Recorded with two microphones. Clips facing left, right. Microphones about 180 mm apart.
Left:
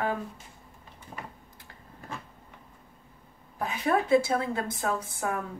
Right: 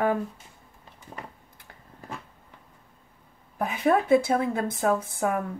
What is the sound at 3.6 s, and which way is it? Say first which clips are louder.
A woman's voice: right 4 dB; 55° right (ahead or behind).